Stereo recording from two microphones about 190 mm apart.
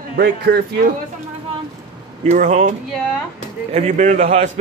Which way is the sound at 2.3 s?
40° right (ahead or behind).